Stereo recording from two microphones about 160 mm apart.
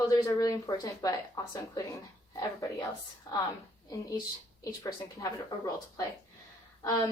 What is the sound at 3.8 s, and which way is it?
Speech, 20° left (ahead or behind).